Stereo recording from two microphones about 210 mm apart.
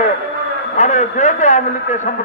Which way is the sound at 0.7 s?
35° left (ahead or behind).